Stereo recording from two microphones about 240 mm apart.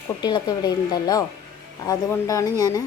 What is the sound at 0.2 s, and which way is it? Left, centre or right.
Speech, centre.